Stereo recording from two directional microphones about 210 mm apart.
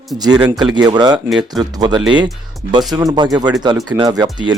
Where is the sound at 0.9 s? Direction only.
20° right (ahead or behind).